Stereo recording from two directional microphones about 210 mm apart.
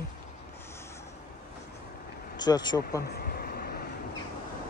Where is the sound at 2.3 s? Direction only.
20° left (ahead or behind).